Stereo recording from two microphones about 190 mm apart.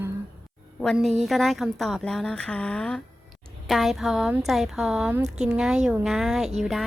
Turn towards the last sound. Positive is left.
turn(degrees=0)  # may be behind; listen again after turning